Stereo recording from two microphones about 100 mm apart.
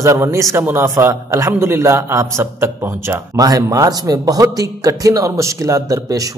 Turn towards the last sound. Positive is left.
turn(degrees=-35)  # may be behind; listen again after turning